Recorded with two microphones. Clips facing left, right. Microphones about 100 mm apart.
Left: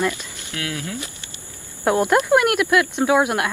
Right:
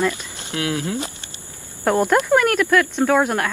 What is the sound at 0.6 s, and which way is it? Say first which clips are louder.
Speech: right 5 dB; 25° right (ahead or behind).